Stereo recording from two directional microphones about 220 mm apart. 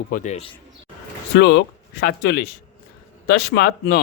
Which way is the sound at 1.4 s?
55° left (ahead or behind).